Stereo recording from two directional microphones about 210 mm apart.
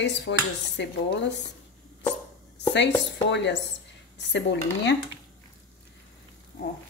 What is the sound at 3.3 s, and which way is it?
Speech, 55° left (ahead or behind).